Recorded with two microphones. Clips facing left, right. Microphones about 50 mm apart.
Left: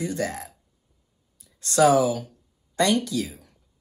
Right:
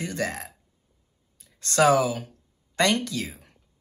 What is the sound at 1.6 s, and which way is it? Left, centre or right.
Speech, right.